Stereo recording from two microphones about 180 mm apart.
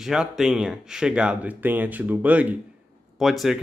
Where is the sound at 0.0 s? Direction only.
5° right (ahead or behind).